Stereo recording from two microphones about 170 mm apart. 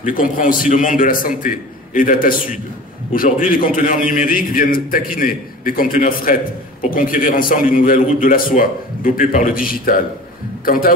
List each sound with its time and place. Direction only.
0.0 s a man's voice: 50° left (ahead or behind)